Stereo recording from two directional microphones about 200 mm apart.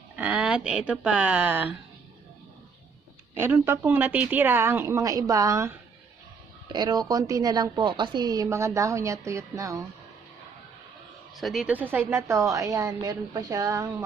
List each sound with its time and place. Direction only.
0.2 s speech: 5° right (ahead or behind)
3.3 s a woman's voice: 10° right (ahead or behind)
11.3 s a woman's voice: centre (ahead or behind); by 13.8 s 15° right (ahead or behind)